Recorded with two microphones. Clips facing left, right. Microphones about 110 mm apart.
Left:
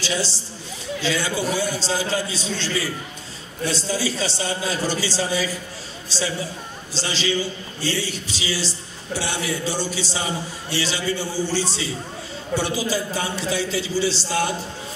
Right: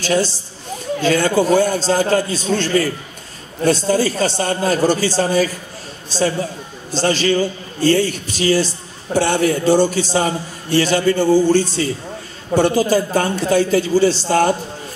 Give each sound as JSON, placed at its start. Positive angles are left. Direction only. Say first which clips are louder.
{"t": 0.0, "sound": "a man's voice", "louder": "right 8 dB", "side_deg": -50}